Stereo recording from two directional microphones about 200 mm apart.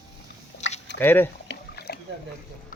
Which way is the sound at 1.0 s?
10° left (ahead or behind).